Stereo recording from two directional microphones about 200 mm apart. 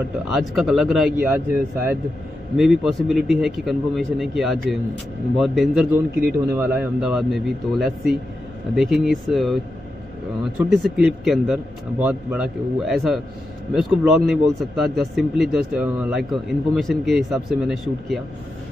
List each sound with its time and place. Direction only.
0.3 s a man's voice: centre (ahead or behind)
10.6 s a man's voice: 5° right (ahead or behind)